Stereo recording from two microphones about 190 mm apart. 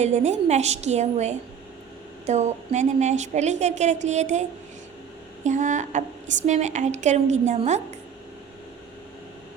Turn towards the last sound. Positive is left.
turn(degrees=-40)  # may be behind; listen again after turning